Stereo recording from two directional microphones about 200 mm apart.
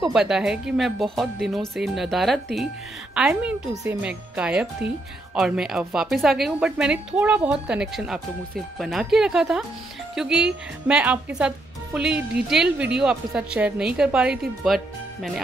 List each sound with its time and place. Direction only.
0.0 s speech: 5° right (ahead or behind)